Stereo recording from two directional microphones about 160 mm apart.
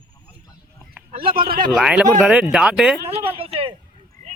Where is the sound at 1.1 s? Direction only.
65° right (ahead or behind).